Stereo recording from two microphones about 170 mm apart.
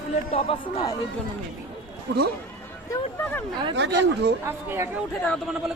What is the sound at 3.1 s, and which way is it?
Speech, 10° left (ahead or behind).